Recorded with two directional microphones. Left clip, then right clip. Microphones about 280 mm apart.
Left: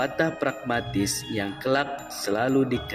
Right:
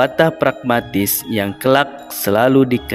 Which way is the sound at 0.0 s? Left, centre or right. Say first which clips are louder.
Right 11 dB; right.